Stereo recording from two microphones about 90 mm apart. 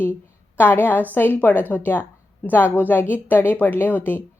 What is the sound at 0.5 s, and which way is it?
Speech, 25° left (ahead or behind).